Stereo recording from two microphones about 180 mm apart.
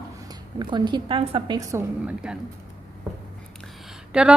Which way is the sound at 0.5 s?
25° right (ahead or behind).